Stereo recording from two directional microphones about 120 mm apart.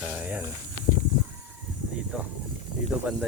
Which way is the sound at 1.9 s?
10° right (ahead or behind).